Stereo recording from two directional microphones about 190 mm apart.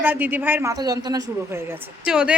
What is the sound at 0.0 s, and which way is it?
A woman's voice, 10° right (ahead or behind).